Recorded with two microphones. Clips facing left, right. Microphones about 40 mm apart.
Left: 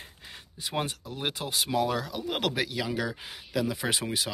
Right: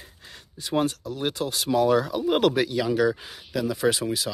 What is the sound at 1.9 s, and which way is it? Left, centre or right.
Speech, centre.